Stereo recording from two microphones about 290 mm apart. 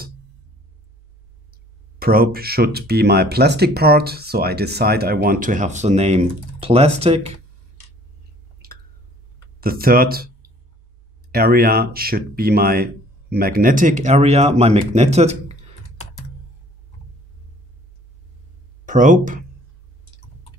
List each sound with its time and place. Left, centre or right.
2.0 s speech: right
8.6 s a sound: right
9.6 s speech: right
18.9 s speech: right